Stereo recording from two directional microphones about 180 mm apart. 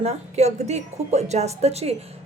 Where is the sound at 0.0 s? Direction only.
35° right (ahead or behind).